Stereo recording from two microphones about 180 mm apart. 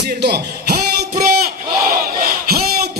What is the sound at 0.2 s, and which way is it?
Speech, 65° right (ahead or behind).